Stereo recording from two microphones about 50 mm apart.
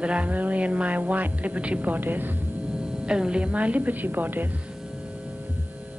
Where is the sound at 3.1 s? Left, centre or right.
Centre; by 4.5 s right.